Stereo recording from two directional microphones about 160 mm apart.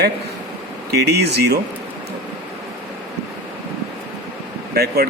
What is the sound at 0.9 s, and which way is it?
Speech, 90° right.